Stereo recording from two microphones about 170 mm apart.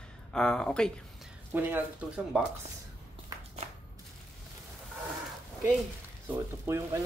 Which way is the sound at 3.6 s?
40° right (ahead or behind).